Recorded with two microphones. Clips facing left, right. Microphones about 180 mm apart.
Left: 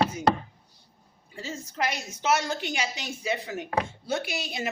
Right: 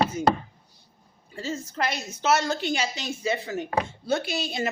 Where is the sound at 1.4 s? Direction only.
15° left (ahead or behind).